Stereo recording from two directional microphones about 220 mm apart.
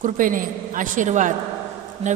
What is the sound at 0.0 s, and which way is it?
A woman's voice, 35° right (ahead or behind).